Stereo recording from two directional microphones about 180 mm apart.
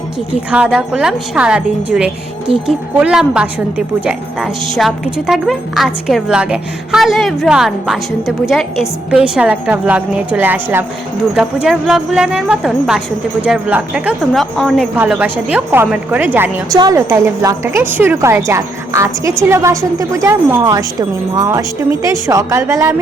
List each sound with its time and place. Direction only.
0.5 s a woman's voice: 5° right (ahead or behind)
2.5 s speech: 30° right (ahead or behind)
3.0 s a woman's voice: 5° right (ahead or behind)